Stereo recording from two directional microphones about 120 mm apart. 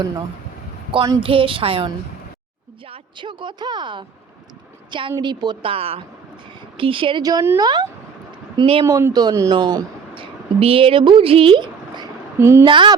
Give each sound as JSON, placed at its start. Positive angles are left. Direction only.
{"t": 1.2, "sound": "speech", "side_deg": -50}
{"t": 2.9, "sound": "a woman's voice", "side_deg": -40}
{"t": 5.7, "sound": "speech", "side_deg": -55}
{"t": 7.2, "sound": "a woman's voice", "side_deg": -30}
{"t": 8.5, "sound": "speech", "side_deg": -50}
{"t": 8.8, "sound": "speech", "side_deg": -25}
{"t": 10.6, "sound": "speech", "side_deg": -50}
{"t": 12.4, "sound": "speech", "side_deg": -20}
{"t": 12.6, "sound": "a woman's voice", "side_deg": -40}